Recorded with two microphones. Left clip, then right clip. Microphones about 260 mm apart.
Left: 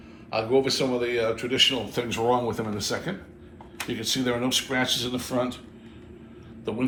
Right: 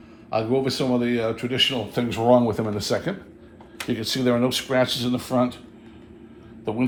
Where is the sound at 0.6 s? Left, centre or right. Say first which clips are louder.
Right 1 dB; right.